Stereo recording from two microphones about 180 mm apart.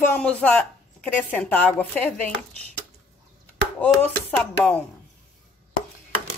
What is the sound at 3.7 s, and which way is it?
A woman's voice, 5° left (ahead or behind).